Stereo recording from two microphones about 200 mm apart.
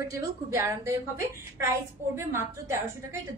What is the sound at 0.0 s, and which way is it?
A woman's voice, 15° right (ahead or behind).